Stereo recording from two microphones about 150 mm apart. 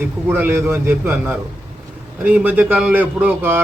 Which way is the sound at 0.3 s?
15° right (ahead or behind).